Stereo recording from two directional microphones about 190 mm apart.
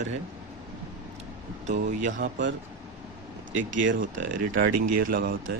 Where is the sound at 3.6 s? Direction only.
85° right.